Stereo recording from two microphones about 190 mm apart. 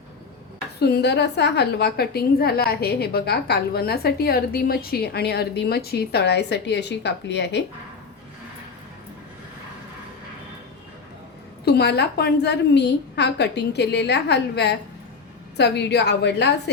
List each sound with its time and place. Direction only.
0.8 s a woman's voice: 60° left (ahead or behind)
11.6 s a woman's voice: 60° left (ahead or behind)